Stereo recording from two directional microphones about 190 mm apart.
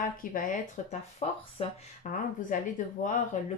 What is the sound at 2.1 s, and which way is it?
A woman's voice, 45° left (ahead or behind).